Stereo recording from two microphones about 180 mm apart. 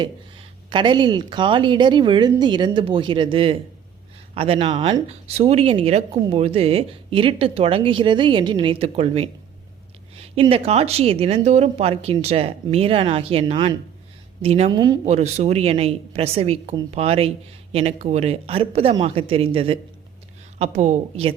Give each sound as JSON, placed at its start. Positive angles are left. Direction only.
{"t": 0.0, "sound": "speech", "side_deg": -25}
{"t": 14.7, "sound": "speech", "side_deg": -25}
{"t": 15.0, "sound": "speech", "side_deg": -35}